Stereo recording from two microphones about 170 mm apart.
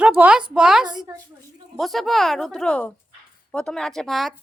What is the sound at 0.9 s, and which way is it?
Speech, 20° right (ahead or behind).